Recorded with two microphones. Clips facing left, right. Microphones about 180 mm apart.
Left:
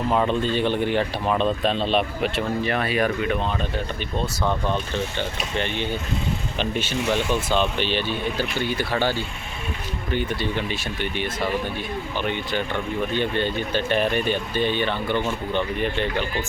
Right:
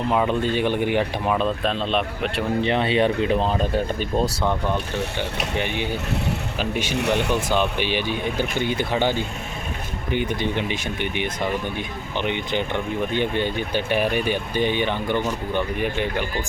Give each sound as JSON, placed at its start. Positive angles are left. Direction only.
{"t": 0.1, "sound": "speech", "side_deg": -5}
{"t": 2.6, "sound": "speech", "side_deg": -20}
{"t": 4.4, "sound": "speech", "side_deg": -15}
{"t": 6.9, "sound": "speech", "side_deg": -65}
{"t": 7.3, "sound": "speech", "side_deg": -10}